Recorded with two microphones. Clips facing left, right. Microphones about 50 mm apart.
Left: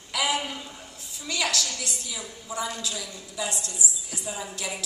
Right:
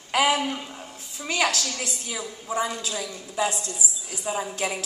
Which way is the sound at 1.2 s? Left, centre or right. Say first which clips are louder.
Right 4 dB; right.